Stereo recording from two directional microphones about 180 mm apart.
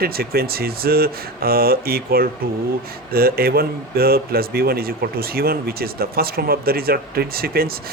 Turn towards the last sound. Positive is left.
turn(degrees=-55)  # may be behind; listen again after turning